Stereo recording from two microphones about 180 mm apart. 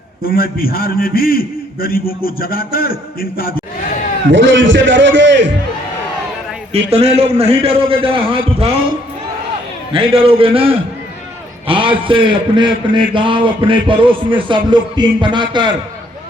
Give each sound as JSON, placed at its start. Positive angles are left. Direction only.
{"t": 0.2, "sound": "a man's voice", "side_deg": 55}
{"t": 4.3, "sound": "a man's voice", "side_deg": -90}
{"t": 6.7, "sound": "a man's voice", "side_deg": -35}
{"t": 9.9, "sound": "a man's voice", "side_deg": -30}